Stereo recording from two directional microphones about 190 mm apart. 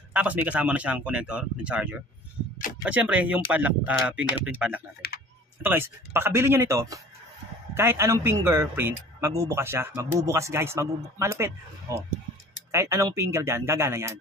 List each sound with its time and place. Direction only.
0.1 s speech: 10° right (ahead or behind)
5.0 s tick-tock: 55° left (ahead or behind)
5.6 s speech: 10° right (ahead or behind)